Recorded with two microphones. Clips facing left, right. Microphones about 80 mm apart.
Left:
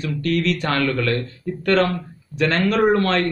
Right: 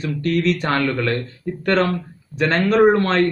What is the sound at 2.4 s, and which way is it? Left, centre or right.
Speech, right.